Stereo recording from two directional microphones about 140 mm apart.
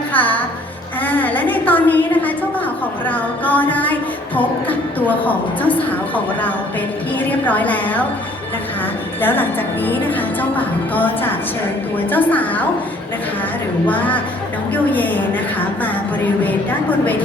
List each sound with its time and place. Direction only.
0.1 s music: 10° left (ahead or behind)
1.0 s a sound: 15° left (ahead or behind)
3.1 s a woman's voice: 10° left (ahead or behind)
9.2 s a woman's voice: 15° left (ahead or behind)
13.8 s a woman's voice: 10° left (ahead or behind)